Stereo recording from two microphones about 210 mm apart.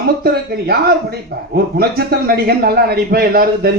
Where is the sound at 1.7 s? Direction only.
50° right (ahead or behind).